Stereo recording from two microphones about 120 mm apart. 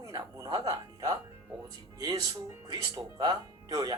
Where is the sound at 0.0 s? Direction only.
30° right (ahead or behind).